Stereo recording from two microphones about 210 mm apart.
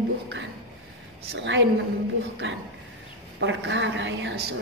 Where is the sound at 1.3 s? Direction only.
60° right (ahead or behind).